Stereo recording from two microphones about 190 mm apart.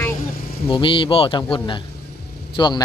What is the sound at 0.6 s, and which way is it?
A man's voice, 25° left (ahead or behind).